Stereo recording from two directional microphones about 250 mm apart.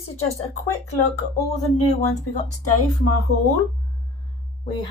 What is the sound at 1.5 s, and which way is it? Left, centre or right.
Speech, left.